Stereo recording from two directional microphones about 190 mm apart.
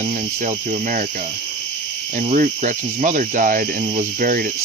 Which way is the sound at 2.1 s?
40° right (ahead or behind).